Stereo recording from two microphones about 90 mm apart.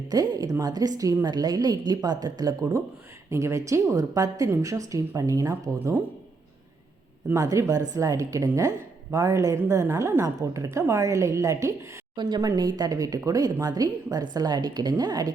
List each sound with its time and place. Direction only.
0.1 s a woman's voice: 45° right (ahead or behind)
7.3 s speech: 40° right (ahead or behind)
12.1 s a woman's voice: 55° right (ahead or behind)